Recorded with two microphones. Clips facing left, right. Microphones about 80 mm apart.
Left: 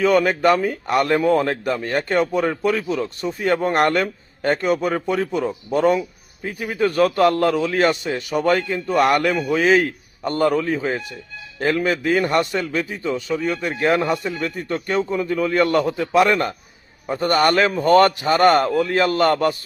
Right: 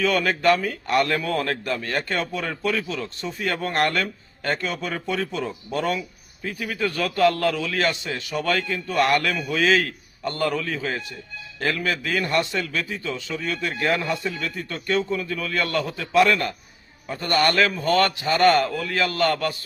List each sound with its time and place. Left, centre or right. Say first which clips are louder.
0.0 s a man's voice: left 5 dB; left